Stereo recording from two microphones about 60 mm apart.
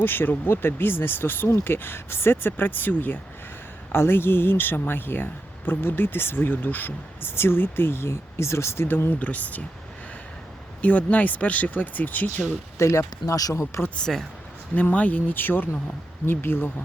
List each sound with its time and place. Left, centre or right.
0.0 s speech: left
3.9 s speech: left
10.8 s speech: left
12.8 s speech: left
13.2 s speech: left
13.5 s speech: left
14.1 s speech: centre
14.8 s speech: left